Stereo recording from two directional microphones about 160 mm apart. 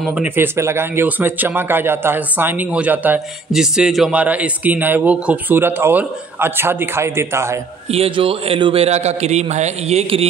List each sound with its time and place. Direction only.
0.0 s speech: 5° right (ahead or behind)
7.9 s a man's voice: 35° right (ahead or behind)